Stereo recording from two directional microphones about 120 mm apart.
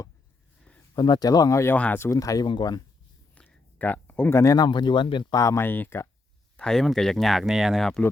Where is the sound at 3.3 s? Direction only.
10° left (ahead or behind); by 5.3 s 40° left (ahead or behind).